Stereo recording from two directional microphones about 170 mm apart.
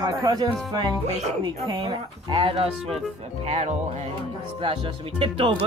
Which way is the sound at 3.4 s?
40° right (ahead or behind).